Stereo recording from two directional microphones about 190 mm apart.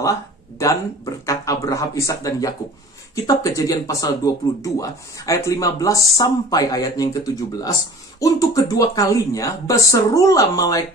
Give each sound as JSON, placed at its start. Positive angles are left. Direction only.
{"t": 0.0, "sound": "speech", "side_deg": 15}
{"t": 8.2, "sound": "speech", "side_deg": 15}